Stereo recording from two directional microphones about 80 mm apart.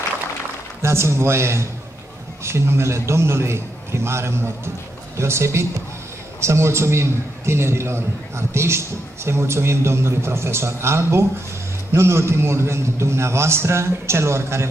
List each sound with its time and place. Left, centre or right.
0.8 s a man's voice: right